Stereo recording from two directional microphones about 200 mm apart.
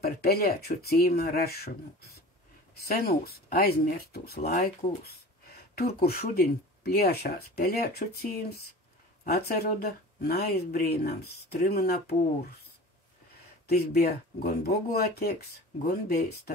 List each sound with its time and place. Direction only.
0.0 s speech: 50° left (ahead or behind)
4.4 s speech: 40° left (ahead or behind)
5.8 s speech: 50° left (ahead or behind)
13.7 s speech: 50° left (ahead or behind)